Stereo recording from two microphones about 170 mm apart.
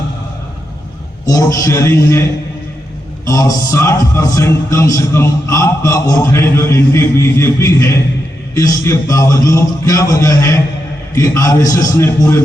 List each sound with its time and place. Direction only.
1.2 s a man's voice: 20° left (ahead or behind)